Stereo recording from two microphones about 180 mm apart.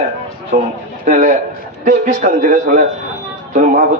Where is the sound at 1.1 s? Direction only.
45° right (ahead or behind).